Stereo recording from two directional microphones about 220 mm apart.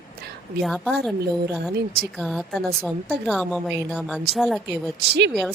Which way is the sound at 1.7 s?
45° right (ahead or behind).